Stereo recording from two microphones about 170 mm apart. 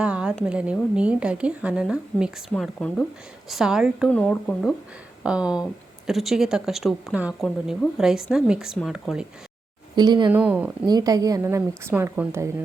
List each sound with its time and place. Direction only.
0.0 s a sound: 5° right (ahead or behind)
0.4 s a woman's voice: 5° right (ahead or behind)
2.5 s a woman's voice: 5° left (ahead or behind)
4.1 s a woman's voice: 5° left (ahead or behind)
9.9 s a woman's voice: 25° right (ahead or behind)
10.2 s a woman's voice: 10° right (ahead or behind)
10.8 s a woman's voice: 20° right (ahead or behind)